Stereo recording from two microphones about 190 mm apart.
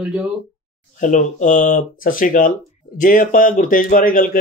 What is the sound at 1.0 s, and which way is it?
Speech, 40° left (ahead or behind).